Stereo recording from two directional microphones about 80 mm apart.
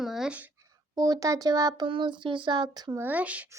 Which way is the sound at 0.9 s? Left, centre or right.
Right.